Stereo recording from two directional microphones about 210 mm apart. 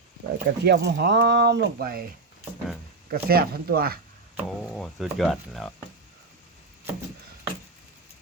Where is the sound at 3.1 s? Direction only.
45° right (ahead or behind).